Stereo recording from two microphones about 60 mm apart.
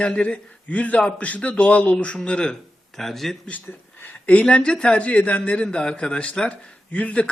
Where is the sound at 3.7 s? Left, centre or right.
Left.